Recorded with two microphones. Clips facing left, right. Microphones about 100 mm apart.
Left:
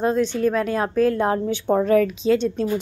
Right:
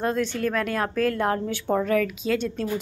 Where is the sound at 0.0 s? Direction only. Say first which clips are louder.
Left 5 dB; 20° left (ahead or behind).